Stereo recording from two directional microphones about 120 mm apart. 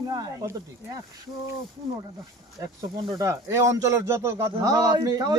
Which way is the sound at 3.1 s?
25° right (ahead or behind).